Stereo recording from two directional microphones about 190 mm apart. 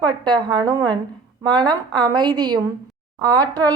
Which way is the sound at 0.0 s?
20° right (ahead or behind).